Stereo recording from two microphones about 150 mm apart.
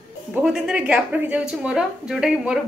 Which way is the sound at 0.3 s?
5° right (ahead or behind).